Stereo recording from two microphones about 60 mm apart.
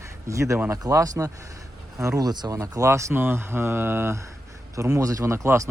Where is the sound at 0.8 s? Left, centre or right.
Right.